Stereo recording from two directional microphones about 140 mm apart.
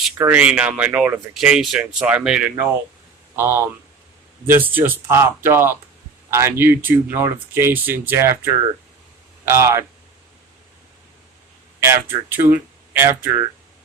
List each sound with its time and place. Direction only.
0.2 s speech: 10° right (ahead or behind)
1.3 s speech: 5° right (ahead or behind)
3.3 s speech: 15° right (ahead or behind)
11.8 s speech: 15° right (ahead or behind)